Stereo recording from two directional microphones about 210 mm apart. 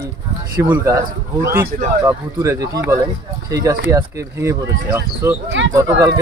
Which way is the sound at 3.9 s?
15° right (ahead or behind).